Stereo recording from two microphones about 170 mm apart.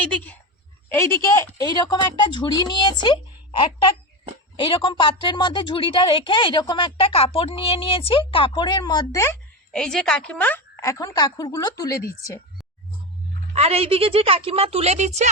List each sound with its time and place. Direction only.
0.0 s speech: 5° left (ahead or behind)
1.0 s a woman's voice: 15° left (ahead or behind)
4.5 s a woman's voice: 30° left (ahead or behind)
9.7 s speech: 5° left (ahead or behind)
13.5 s a woman's voice: 35° right (ahead or behind)